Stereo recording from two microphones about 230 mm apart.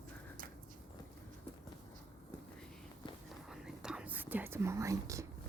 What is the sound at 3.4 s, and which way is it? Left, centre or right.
Whispering, centre.